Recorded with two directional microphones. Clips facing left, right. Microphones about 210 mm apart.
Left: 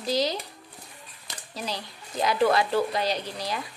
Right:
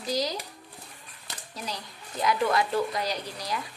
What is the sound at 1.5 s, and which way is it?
Speech, 30° left (ahead or behind).